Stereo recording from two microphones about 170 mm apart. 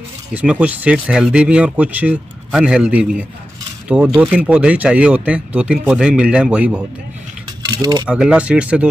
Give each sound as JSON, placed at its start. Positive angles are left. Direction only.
{"t": 0.3, "sound": "speech", "side_deg": -10}
{"t": 7.7, "sound": "coin", "side_deg": -25}
{"t": 8.1, "sound": "speech", "side_deg": -5}